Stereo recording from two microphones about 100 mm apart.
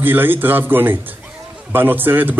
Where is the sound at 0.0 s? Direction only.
20° right (ahead or behind).